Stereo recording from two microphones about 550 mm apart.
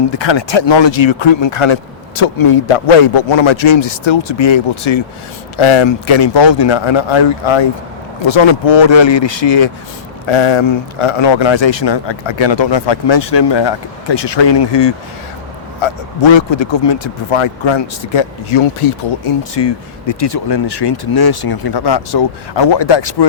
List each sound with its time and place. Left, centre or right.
0.1 s speech: left